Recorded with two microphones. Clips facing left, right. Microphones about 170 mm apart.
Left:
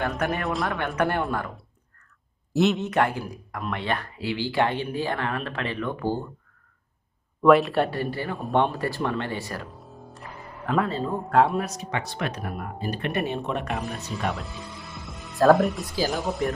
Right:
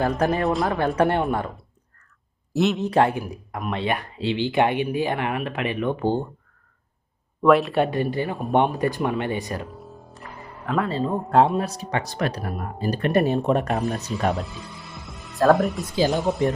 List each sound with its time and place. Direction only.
0.4 s speech: centre (ahead or behind)
0.8 s speech: 30° right (ahead or behind)
2.5 s speech: centre (ahead or behind)
2.8 s speech: 30° right (ahead or behind)
7.4 s speech: centre (ahead or behind)
7.8 s speech: 15° right (ahead or behind)
9.6 s music: centre (ahead or behind)
11.0 s speech: 25° right (ahead or behind); by 14.4 s 40° right (ahead or behind)
14.4 s music: centre (ahead or behind)
16.3 s speech: 20° right (ahead or behind)